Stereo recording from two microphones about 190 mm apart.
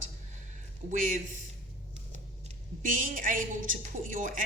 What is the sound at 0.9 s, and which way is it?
Speech, 45° right (ahead or behind).